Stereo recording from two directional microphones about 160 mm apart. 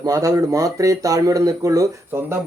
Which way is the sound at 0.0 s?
20° right (ahead or behind).